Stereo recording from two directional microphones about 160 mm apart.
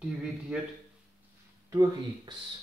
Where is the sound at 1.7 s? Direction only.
20° right (ahead or behind).